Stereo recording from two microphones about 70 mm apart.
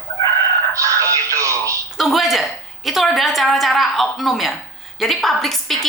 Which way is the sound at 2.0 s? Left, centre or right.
Centre.